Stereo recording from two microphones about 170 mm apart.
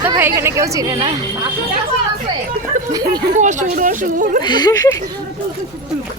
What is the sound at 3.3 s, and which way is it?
Speech, 45° right (ahead or behind).